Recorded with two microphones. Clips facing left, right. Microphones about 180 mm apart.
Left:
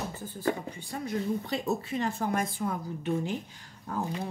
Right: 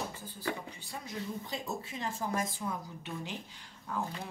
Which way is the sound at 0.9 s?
65° left (ahead or behind).